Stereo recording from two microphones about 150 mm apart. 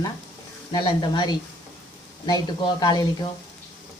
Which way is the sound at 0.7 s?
30° left (ahead or behind).